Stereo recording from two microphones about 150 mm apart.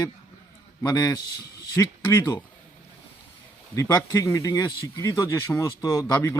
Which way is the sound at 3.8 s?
20° left (ahead or behind).